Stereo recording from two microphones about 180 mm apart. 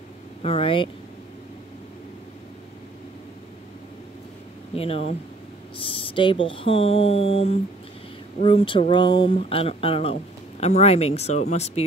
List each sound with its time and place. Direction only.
0.4 s speech: 30° left (ahead or behind)
4.7 s speech: 35° left (ahead or behind)